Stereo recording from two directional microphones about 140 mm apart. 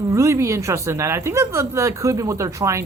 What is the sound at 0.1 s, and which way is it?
Speech, 20° right (ahead or behind).